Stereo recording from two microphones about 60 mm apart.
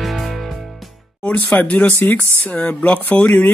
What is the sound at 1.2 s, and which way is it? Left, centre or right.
Speech, left.